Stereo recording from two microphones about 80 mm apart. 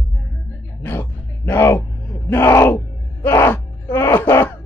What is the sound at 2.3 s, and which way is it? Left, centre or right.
Speech, left.